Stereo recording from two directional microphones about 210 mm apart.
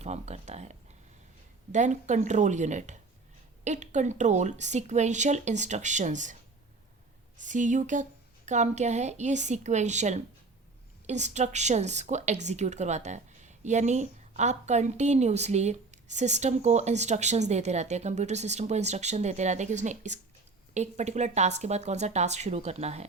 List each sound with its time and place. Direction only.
0.0 s a sound: 30° right (ahead or behind)
1.7 s speech: 35° right (ahead or behind)
7.3 s speech: 35° right (ahead or behind)